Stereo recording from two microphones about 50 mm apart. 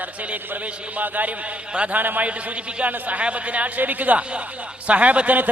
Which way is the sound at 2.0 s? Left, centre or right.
Right.